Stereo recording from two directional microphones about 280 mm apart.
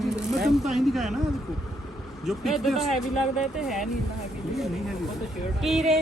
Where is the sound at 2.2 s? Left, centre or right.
Centre.